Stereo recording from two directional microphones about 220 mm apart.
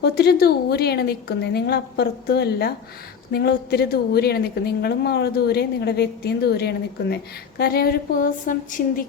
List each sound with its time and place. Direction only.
0.0 s a woman's voice: 45° left (ahead or behind)